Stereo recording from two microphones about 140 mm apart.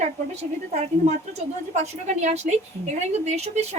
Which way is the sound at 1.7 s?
55° right (ahead or behind).